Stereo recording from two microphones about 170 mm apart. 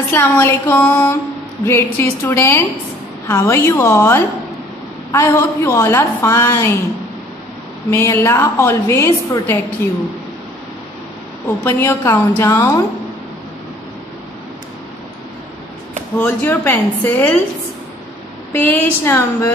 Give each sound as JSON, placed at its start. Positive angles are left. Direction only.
{"t": 0.1, "sound": "a woman's voice", "side_deg": 15}
{"t": 7.9, "sound": "a woman's voice", "side_deg": 15}
{"t": 11.6, "sound": "a woman's voice", "side_deg": 15}
{"t": 16.2, "sound": "a woman's voice", "side_deg": 10}
{"t": 18.5, "sound": "a woman's voice", "side_deg": 10}